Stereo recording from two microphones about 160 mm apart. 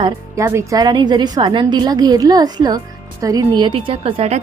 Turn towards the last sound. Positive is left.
turn(degrees=-40)  # may be behind; listen again after turning